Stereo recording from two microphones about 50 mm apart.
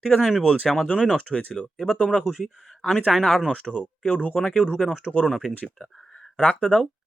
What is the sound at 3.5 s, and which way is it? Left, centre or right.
Speech, left.